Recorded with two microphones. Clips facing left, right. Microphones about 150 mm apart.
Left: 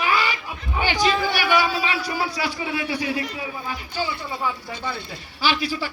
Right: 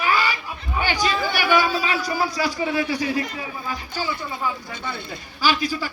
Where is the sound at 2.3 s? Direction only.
40° right (ahead or behind).